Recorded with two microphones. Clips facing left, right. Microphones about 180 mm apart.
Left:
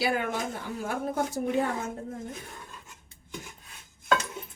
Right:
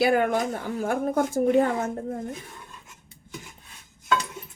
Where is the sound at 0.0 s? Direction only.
55° right (ahead or behind).